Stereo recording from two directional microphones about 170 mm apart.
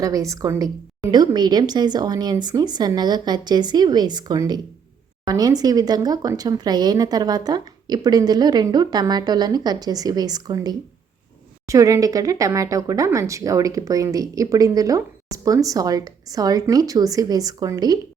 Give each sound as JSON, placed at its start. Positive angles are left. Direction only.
{"t": 0.0, "sound": "speech", "side_deg": -20}